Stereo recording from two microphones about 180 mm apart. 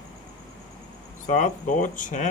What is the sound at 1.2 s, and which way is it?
Speech, 45° left (ahead or behind).